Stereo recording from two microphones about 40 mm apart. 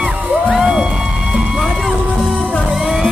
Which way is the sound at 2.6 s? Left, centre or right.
Centre.